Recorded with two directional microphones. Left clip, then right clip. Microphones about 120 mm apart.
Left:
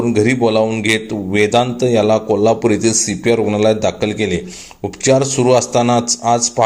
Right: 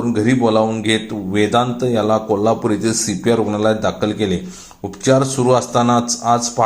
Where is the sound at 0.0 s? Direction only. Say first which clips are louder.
Left 2 dB; 45° left (ahead or behind).